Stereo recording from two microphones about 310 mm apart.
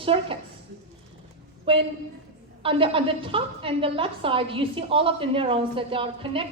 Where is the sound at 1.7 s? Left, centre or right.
Centre.